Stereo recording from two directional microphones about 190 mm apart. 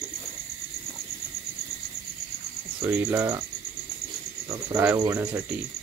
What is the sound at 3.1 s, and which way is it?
Speech, 15° right (ahead or behind).